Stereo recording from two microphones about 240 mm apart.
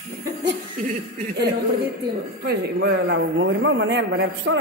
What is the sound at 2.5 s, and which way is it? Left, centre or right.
A man's voice, right.